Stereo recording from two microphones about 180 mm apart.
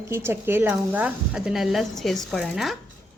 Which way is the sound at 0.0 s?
15° right (ahead or behind).